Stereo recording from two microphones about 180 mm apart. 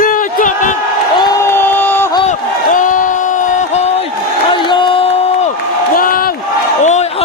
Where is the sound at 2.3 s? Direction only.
45° left (ahead or behind).